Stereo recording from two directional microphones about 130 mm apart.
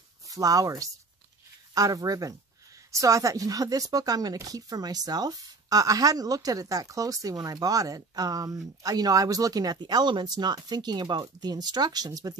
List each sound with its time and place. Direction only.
0.3 s speech: 30° right (ahead or behind)